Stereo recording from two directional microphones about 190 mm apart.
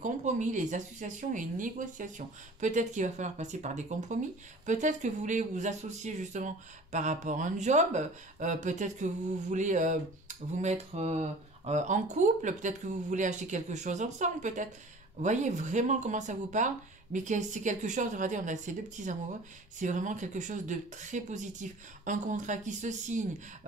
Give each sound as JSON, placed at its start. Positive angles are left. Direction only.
{"t": 0.0, "sound": "speech", "side_deg": -40}